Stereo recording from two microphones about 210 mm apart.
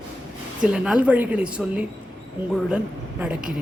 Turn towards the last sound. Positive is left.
turn(degrees=-5)  # may be behind; listen again after turning